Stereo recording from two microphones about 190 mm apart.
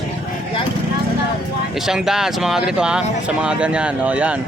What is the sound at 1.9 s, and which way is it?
Speech, centre (ahead or behind).